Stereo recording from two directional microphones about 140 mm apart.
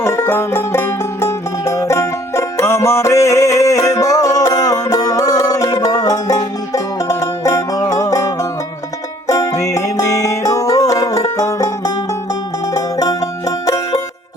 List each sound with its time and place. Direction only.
0.0 s music: 20° left (ahead or behind)